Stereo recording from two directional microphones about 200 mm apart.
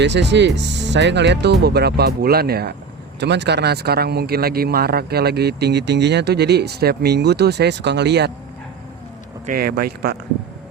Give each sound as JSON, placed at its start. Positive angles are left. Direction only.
{"t": 0.0, "sound": "a man's voice", "side_deg": -60}
{"t": 9.5, "sound": "speech", "side_deg": -50}